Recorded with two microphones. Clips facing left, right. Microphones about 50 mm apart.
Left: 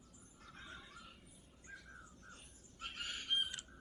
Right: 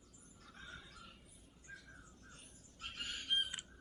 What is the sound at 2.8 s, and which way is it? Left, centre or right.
Bird, centre.